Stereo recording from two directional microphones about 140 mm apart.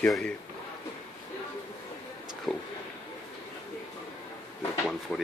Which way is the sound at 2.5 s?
5° left (ahead or behind).